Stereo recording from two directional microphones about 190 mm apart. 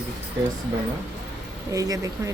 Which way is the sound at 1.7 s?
20° right (ahead or behind).